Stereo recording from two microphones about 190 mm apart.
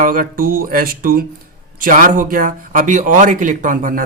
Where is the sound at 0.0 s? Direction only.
45° right (ahead or behind).